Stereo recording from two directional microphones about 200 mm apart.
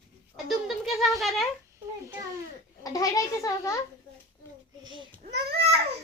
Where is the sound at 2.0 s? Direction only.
15° right (ahead or behind).